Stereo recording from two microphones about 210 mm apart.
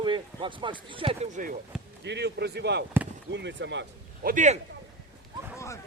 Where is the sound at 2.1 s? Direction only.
55° right (ahead or behind).